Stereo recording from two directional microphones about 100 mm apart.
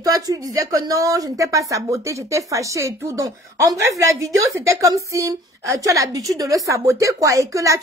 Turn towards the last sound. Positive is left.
turn(degrees=-35)  # may be behind; listen again after turning